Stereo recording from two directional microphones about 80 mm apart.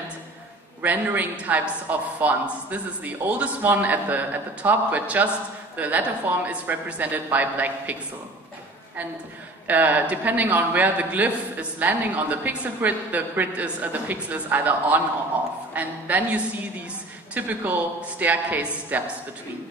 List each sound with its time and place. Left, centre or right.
0.8 s a man's voice: right
9.7 s a man's voice: right